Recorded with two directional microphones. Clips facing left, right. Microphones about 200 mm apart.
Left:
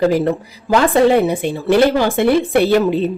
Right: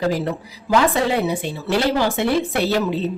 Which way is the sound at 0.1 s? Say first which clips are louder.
Left 7 dB; 55° left (ahead or behind).